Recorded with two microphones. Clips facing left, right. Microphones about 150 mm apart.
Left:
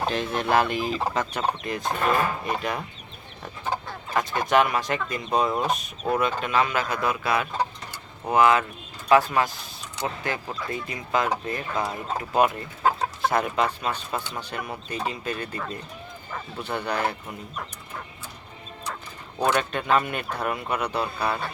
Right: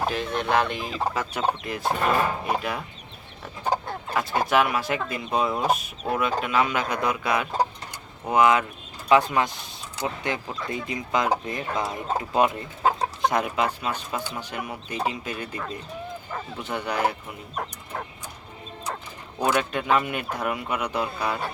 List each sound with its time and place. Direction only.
0.0 s speech: 5° right (ahead or behind)
4.1 s speech: 5° right (ahead or behind)
17.5 s speech: 55° right (ahead or behind)
19.4 s speech: 10° right (ahead or behind)